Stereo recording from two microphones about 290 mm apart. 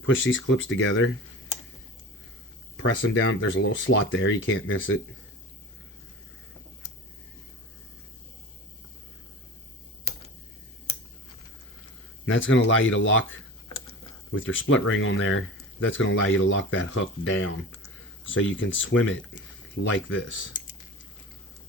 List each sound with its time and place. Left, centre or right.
0.0 s speech: left
2.7 s speech: left
12.2 s speech: left